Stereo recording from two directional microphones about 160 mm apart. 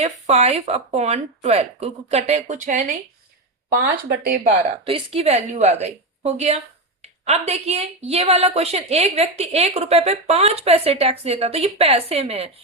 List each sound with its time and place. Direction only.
0.0 s speech: 45° right (ahead or behind)
4.1 s speech: 50° right (ahead or behind)
4.9 s a woman's voice: 35° right (ahead or behind)